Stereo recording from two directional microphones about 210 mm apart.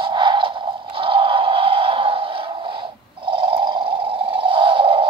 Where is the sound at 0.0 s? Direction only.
25° right (ahead or behind).